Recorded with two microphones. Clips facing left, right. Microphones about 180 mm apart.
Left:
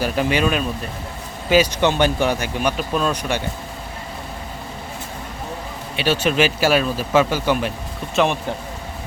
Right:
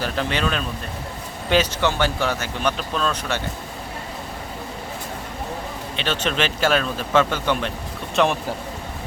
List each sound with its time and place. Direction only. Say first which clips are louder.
0.0 s speech: left 4 dB; 10° left (ahead or behind)
1.8 s speech: left 4 dB; 20° left (ahead or behind)
6.0 s speech: left 6 dB; 10° left (ahead or behind)